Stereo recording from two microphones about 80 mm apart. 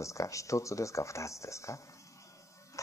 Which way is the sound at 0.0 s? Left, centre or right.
Left.